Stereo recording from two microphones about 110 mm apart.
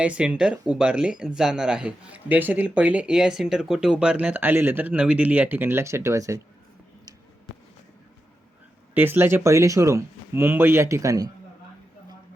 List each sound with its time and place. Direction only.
0.0 s speech: 10° right (ahead or behind); by 6.4 s 30° right (ahead or behind)
9.0 s speech: 20° right (ahead or behind)